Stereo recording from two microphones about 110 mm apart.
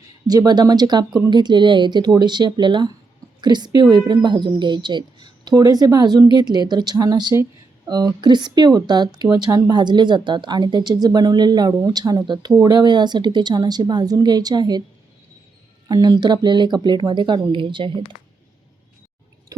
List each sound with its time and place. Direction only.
0.3 s a woman's voice: 35° right (ahead or behind)
15.9 s speech: 40° right (ahead or behind)